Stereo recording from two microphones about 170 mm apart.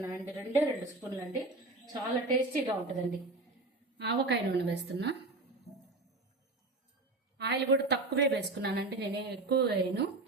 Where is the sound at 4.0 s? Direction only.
80° right.